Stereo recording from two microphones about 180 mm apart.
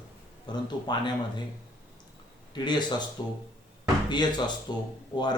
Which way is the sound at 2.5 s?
25° left (ahead or behind).